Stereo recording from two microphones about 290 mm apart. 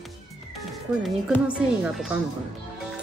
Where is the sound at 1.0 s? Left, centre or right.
Centre.